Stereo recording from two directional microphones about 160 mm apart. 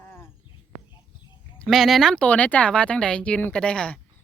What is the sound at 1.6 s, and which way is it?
Speech, centre (ahead or behind).